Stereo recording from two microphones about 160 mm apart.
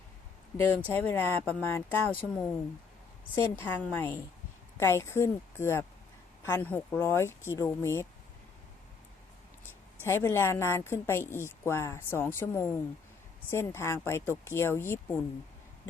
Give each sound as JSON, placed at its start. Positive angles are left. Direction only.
{"t": 0.5, "sound": "a woman's voice", "side_deg": 10}
{"t": 10.0, "sound": "a woman's voice", "side_deg": 15}